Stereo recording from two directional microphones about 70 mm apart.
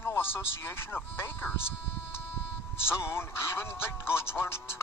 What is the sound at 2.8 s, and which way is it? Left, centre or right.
Speech, left.